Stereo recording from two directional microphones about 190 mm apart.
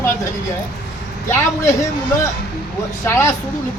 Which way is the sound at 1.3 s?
15° left (ahead or behind).